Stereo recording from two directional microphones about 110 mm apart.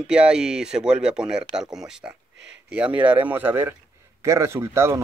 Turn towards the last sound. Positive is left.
turn(degrees=-25)  # may be behind; listen again after turning